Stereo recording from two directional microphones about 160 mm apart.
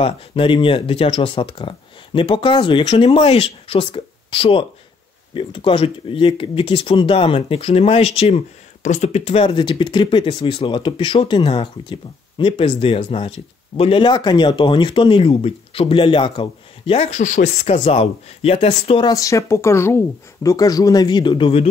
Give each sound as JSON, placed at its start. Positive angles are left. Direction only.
{"t": 0.0, "sound": "speech", "side_deg": 35}
{"t": 19.0, "sound": "speech", "side_deg": 20}